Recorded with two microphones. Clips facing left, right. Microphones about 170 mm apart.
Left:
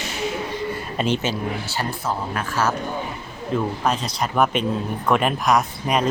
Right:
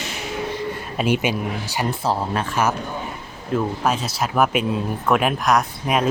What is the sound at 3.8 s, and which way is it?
Speech, 5° right (ahead or behind).